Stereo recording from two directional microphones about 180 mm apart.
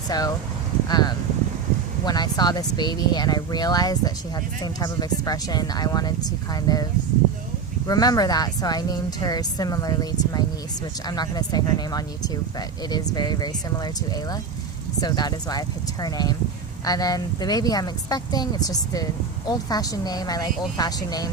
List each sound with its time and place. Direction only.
0.1 s speech: 20° left (ahead or behind)
7.9 s speech: 20° left (ahead or behind)